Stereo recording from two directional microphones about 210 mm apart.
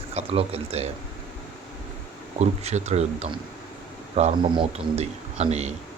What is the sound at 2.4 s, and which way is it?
A man's voice, 30° right (ahead or behind).